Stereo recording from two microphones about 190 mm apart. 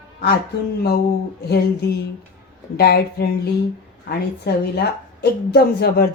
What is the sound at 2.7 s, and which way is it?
Speech, 55° left (ahead or behind).